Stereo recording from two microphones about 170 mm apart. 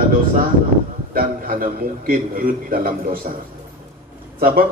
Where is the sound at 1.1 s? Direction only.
60° right (ahead or behind).